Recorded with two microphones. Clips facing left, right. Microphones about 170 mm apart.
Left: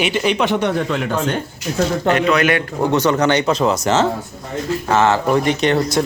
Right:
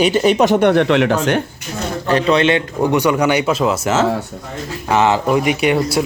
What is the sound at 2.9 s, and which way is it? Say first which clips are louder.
Speech: even; 15° right (ahead or behind).